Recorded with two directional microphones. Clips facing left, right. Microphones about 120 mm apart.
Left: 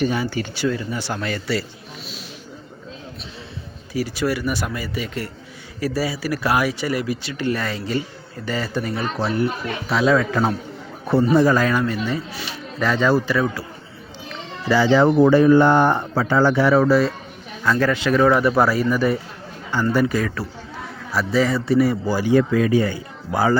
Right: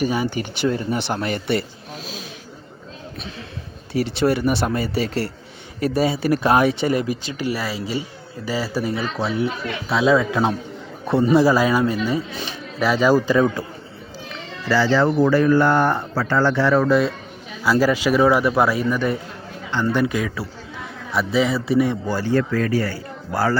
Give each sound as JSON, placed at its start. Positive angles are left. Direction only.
{"t": 0.0, "sound": "speech", "side_deg": -15}
{"t": 3.9, "sound": "speech", "side_deg": -25}
{"t": 7.5, "sound": "a man's voice", "side_deg": -5}
{"t": 14.7, "sound": "speech", "side_deg": 15}
{"t": 17.6, "sound": "a man's voice", "side_deg": -10}